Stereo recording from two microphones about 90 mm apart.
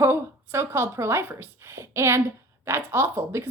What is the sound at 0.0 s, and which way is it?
A woman's voice, 30° right (ahead or behind).